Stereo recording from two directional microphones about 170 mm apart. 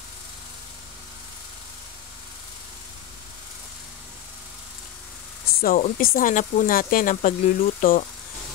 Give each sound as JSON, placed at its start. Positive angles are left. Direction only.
{"t": 5.6, "sound": "speech", "side_deg": 55}